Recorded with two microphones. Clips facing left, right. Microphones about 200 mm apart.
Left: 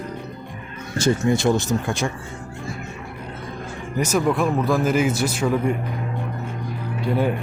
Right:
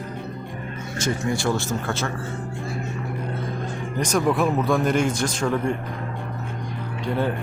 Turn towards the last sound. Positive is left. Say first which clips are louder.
# left 3 dB
turn(degrees=10)  # may be behind; listen again after turning